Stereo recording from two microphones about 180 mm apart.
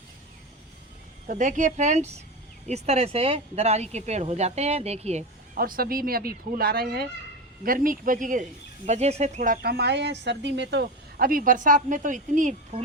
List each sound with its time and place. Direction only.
1.3 s speech: 45° right (ahead or behind)
5.5 s speech: 55° right (ahead or behind)